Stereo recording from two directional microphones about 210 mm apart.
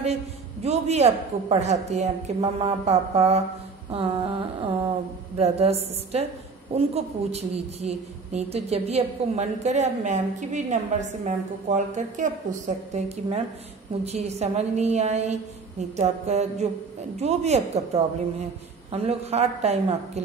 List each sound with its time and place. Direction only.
0.0 s a woman's voice: 30° right (ahead or behind)